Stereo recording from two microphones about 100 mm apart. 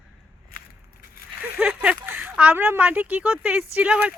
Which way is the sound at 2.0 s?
20° right (ahead or behind).